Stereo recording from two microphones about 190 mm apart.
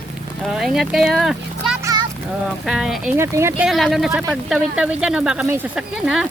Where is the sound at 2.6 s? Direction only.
Centre (ahead or behind).